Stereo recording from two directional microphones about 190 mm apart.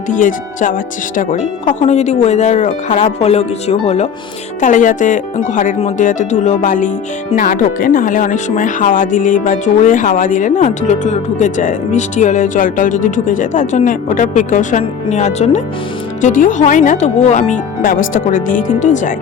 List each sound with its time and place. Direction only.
0.1 s speech: 45° left (ahead or behind)